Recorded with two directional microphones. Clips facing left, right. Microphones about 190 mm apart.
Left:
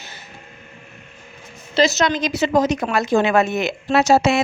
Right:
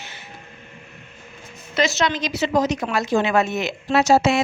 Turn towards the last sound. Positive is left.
turn(degrees=60)  # may be behind; listen again after turning